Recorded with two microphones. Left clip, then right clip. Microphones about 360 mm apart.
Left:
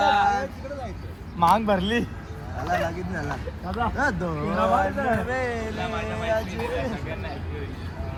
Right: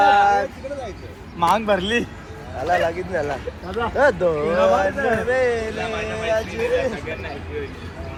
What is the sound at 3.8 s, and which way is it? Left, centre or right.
Speech, centre.